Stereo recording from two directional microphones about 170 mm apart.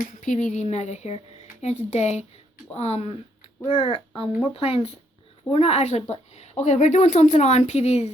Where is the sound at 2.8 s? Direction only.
40° left (ahead or behind).